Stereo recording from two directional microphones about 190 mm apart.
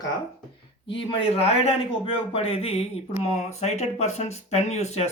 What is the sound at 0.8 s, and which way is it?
Speech, 30° left (ahead or behind).